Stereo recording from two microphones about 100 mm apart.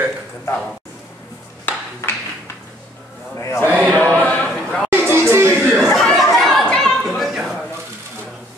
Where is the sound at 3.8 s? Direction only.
15° left (ahead or behind).